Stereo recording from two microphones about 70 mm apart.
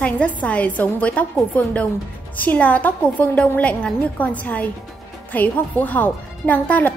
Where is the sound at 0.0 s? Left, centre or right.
Left.